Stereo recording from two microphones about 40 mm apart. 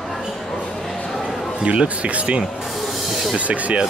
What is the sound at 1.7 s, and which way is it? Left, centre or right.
Speech, right.